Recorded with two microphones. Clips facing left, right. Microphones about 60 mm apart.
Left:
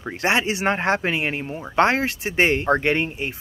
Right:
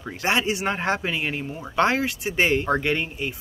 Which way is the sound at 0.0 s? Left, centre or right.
Left.